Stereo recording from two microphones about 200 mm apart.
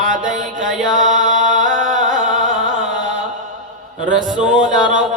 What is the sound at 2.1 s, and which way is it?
Music, 40° right (ahead or behind).